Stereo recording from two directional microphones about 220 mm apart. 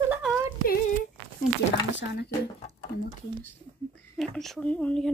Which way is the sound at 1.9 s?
50° left (ahead or behind).